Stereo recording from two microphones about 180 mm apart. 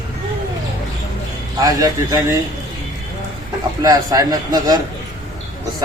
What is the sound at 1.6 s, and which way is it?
Speech, 20° right (ahead or behind).